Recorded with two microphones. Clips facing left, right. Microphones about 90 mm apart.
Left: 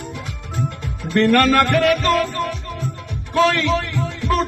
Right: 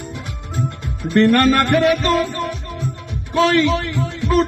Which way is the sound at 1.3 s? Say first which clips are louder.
Even; 30° right (ahead or behind).